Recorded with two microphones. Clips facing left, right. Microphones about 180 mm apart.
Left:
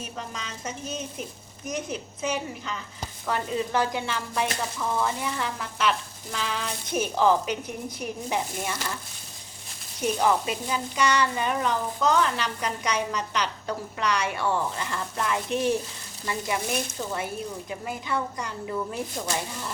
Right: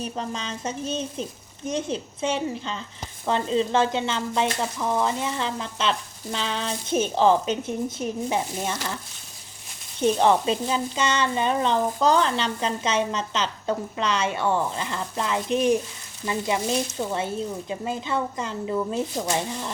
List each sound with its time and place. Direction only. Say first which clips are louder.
0.0 s frying: right 6 dB; 30° right (ahead or behind)
10.0 s frying: right 4 dB; 25° right (ahead or behind)